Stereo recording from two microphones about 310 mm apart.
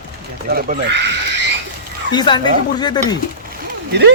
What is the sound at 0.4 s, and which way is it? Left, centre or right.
Speech, right.